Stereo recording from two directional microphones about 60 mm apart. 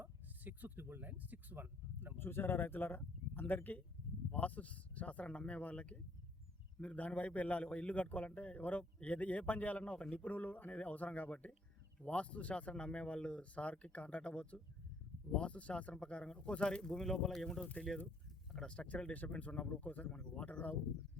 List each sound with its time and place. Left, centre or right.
0.0 s speech: right
2.1 s a man's voice: left